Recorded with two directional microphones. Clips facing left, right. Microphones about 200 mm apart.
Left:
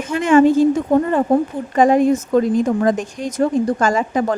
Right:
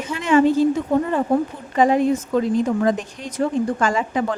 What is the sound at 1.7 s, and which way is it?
A woman's voice, 45° left (ahead or behind).